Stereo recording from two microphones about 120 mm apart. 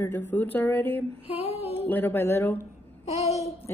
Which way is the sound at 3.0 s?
65° left (ahead or behind).